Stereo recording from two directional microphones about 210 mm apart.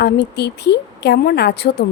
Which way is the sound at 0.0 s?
50° left (ahead or behind).